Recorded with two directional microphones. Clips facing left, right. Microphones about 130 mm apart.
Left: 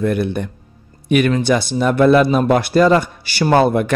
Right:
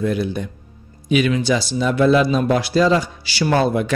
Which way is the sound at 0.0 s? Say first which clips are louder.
Left 3 dB; 60° left (ahead or behind).